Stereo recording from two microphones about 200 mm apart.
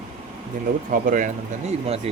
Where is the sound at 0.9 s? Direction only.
40° right (ahead or behind).